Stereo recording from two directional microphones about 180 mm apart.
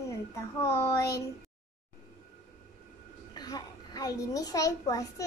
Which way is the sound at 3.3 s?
20° left (ahead or behind).